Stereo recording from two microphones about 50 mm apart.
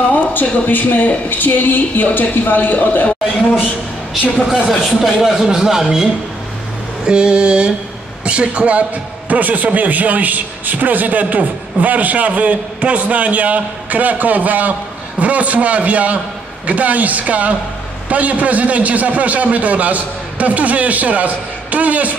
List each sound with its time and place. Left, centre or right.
0.1 s a sound: left
0.7 s speech: left
4.6 s speech: centre
7.1 s a man's voice: centre